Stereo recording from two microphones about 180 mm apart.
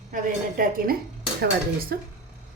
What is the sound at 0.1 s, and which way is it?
A woman's voice, 50° right (ahead or behind).